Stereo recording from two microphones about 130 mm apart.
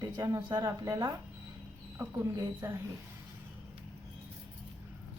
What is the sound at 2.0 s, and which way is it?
Speech, 15° right (ahead or behind).